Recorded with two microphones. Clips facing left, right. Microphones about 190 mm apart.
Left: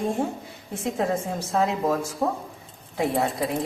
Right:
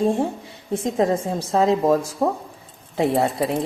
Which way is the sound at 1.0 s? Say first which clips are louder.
Right 5 dB; 35° right (ahead or behind).